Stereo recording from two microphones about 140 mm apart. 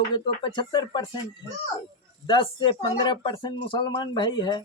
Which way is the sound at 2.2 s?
35° left (ahead or behind).